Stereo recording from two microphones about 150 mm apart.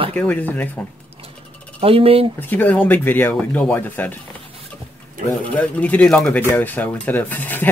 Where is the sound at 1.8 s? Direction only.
40° right (ahead or behind).